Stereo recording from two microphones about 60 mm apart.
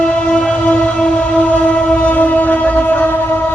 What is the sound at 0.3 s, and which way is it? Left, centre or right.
Train, centre.